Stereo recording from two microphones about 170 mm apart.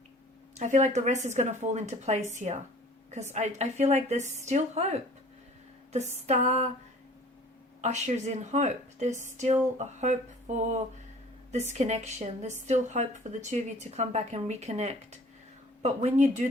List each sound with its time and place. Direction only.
0.5 s a woman's voice: 45° right (ahead or behind)
7.8 s a woman's voice: 40° right (ahead or behind)